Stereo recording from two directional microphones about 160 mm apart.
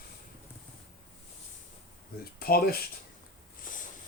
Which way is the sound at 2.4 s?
70° left (ahead or behind).